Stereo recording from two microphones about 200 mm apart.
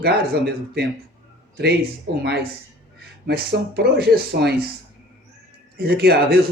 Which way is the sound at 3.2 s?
55° right (ahead or behind).